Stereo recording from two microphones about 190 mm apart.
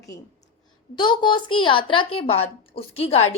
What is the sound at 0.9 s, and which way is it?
A woman's voice, 25° left (ahead or behind).